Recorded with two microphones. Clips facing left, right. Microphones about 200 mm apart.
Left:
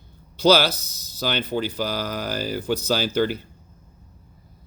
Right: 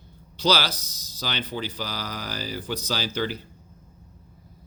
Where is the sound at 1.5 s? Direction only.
50° left (ahead or behind).